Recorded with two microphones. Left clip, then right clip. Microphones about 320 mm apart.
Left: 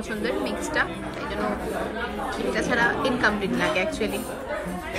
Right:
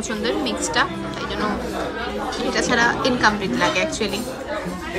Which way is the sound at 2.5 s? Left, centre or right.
Centre.